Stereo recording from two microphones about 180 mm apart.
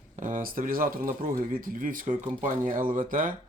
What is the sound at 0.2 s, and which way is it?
Speech, 45° right (ahead or behind).